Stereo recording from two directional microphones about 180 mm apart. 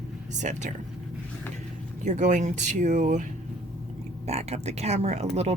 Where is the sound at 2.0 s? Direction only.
40° right (ahead or behind).